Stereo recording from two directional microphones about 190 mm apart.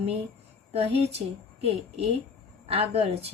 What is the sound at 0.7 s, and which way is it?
Speech, 30° right (ahead or behind).